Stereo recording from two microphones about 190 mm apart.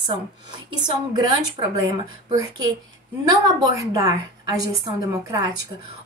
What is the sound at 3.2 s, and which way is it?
A woman's voice, 20° right (ahead or behind).